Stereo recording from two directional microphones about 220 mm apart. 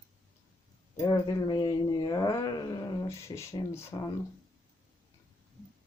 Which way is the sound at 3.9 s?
20° left (ahead or behind).